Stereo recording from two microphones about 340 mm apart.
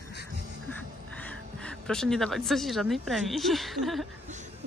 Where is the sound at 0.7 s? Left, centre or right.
Centre.